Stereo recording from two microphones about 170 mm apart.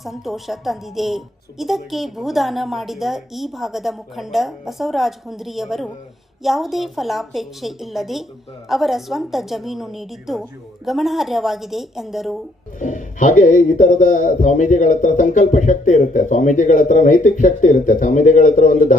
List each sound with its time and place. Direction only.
0.0 s a woman's voice: centre (ahead or behind)
12.8 s speech: 45° left (ahead or behind)